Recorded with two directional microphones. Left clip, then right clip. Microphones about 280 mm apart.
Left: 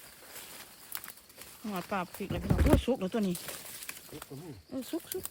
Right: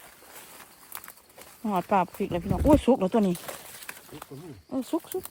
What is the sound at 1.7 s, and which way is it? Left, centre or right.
Speech, centre.